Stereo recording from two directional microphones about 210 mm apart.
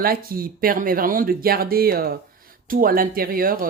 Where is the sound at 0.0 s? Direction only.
45° right (ahead or behind).